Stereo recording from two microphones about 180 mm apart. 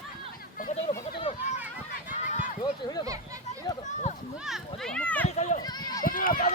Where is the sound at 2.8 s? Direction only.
20° left (ahead or behind).